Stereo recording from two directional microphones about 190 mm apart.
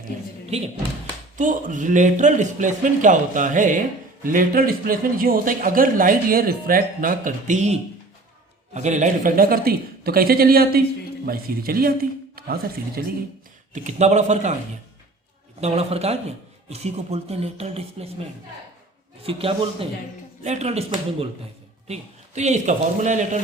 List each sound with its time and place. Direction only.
1.4 s speech: 40° right (ahead or behind)
13.7 s a man's voice: 35° right (ahead or behind)
15.6 s a man's voice: 35° right (ahead or behind)
19.2 s a man's voice: 30° right (ahead or behind)